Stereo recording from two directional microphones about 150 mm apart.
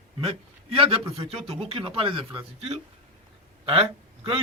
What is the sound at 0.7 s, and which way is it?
A man's voice, 40° right (ahead or behind).